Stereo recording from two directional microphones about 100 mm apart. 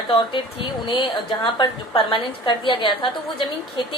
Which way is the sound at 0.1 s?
55° left (ahead or behind).